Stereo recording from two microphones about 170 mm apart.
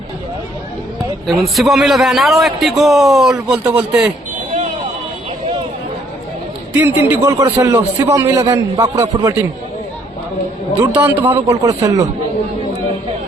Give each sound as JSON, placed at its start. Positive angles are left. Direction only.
{"t": 1.3, "sound": "a man's voice", "side_deg": 0}
{"t": 6.7, "sound": "a man's voice", "side_deg": -10}
{"t": 10.8, "sound": "a man's voice", "side_deg": -10}